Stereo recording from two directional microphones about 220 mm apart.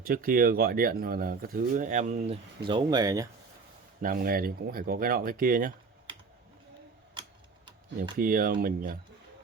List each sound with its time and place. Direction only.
0.0 s speech: 40° right (ahead or behind)
2.6 s speech: 20° right (ahead or behind)
4.0 s speech: 40° right (ahead or behind)
8.1 s speech: 40° right (ahead or behind)